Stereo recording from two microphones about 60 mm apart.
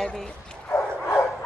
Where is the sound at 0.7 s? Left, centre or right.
Left.